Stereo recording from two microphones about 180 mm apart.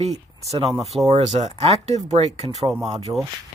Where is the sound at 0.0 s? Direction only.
35° right (ahead or behind).